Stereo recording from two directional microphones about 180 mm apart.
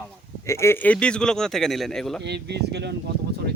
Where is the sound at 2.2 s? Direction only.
70° right (ahead or behind).